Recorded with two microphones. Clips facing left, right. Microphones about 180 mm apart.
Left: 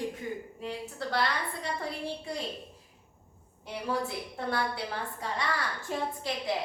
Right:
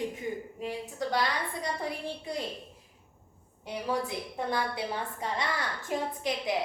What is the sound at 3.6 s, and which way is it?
A woman's voice, 15° right (ahead or behind).